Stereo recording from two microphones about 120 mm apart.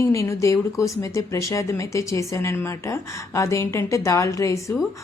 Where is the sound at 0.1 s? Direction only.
25° left (ahead or behind).